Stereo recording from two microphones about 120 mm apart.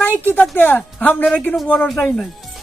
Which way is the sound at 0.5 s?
15° left (ahead or behind).